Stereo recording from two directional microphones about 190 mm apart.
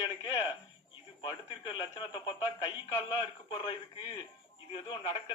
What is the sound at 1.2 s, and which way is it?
A man's voice, 25° left (ahead or behind).